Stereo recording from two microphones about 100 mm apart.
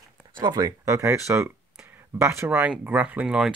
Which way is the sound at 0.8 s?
30° right (ahead or behind).